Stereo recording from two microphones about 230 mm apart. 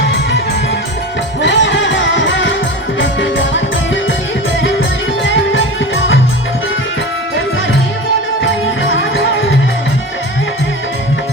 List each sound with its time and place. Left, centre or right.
1.4 s music: left
5.2 s music: left
8.9 s music: left